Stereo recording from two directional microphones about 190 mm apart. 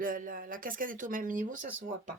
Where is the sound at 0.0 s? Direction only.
45° right (ahead or behind).